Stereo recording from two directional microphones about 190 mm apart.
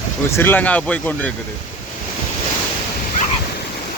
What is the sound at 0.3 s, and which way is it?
Speech, 10° left (ahead or behind).